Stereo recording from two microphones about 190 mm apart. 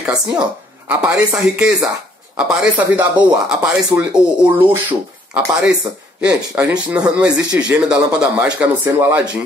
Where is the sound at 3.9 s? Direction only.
20° right (ahead or behind).